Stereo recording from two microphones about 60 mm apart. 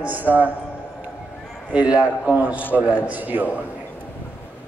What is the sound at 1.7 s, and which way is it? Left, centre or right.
A man's voice, right.